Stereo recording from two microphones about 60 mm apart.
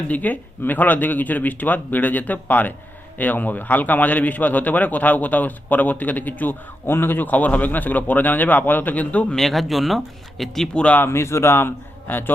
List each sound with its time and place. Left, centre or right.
0.1 s a man's voice: left
9.3 s speech: centre
10.8 s a man's voice: left
11.0 s a man's voice: left